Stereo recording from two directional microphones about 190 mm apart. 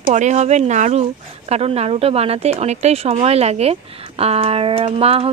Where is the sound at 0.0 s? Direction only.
40° right (ahead or behind).